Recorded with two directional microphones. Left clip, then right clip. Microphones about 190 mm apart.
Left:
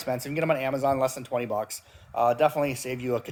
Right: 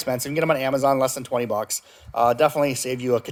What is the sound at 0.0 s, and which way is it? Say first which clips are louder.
Speech: right 5 dB; 40° right (ahead or behind).